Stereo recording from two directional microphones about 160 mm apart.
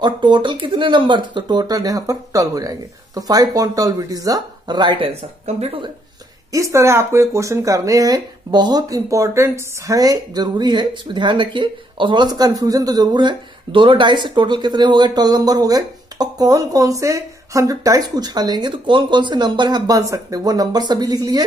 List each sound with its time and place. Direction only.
0.0 s speech: 30° right (ahead or behind)
6.5 s speech: 20° right (ahead or behind)